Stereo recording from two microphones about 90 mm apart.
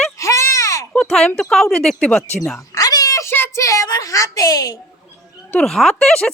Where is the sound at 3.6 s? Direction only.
35° left (ahead or behind).